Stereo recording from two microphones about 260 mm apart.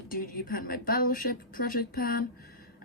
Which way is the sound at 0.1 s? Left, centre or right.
Left.